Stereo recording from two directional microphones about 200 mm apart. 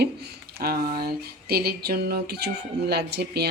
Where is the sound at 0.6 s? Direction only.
50° right (ahead or behind).